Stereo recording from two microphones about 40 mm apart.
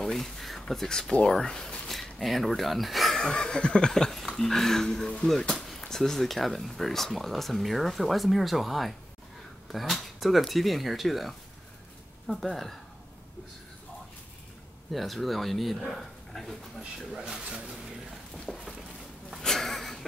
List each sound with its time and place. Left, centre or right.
0.0 s speech: centre
1.9 s speech: centre
3.2 s chuckle: centre
3.9 s speech: centre
14.9 s speech: centre
17.3 s speech: centre
18.5 s a sound: centre